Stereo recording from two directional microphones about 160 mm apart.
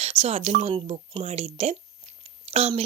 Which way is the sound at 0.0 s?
40° right (ahead or behind).